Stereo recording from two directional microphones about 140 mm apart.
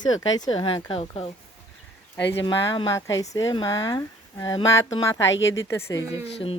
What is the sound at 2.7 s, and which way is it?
Speech, 30° left (ahead or behind).